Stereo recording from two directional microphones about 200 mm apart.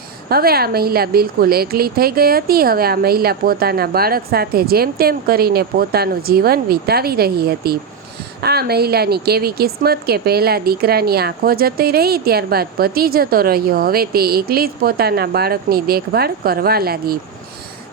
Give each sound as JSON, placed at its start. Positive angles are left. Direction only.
{"t": 0.3, "sound": "a woman's voice", "side_deg": -50}